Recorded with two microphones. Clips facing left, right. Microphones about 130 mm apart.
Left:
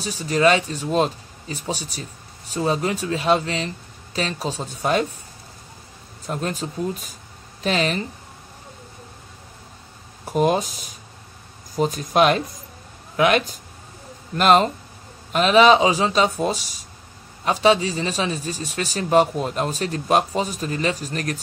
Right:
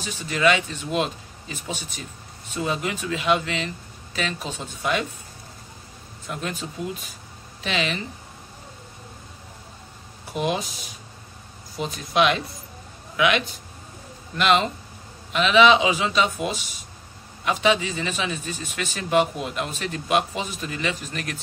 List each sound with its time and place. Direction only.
0.0 s speech: 35° left (ahead or behind)
6.2 s speech: 35° left (ahead or behind)
10.2 s speech: 45° left (ahead or behind)